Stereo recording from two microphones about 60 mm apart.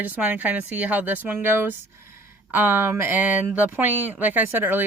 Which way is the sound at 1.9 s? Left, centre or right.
Right.